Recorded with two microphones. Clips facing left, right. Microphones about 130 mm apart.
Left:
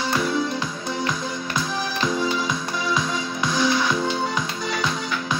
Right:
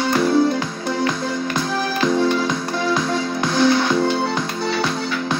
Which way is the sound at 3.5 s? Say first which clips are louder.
Right 5 dB; 55° right (ahead or behind).